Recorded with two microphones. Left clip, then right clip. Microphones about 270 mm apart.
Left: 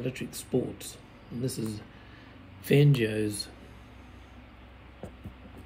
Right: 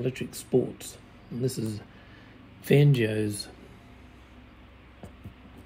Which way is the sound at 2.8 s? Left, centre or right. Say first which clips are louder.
Right 1 dB; centre.